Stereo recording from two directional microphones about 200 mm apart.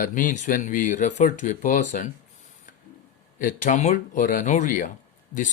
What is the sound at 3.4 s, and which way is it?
Speech, 40° left (ahead or behind).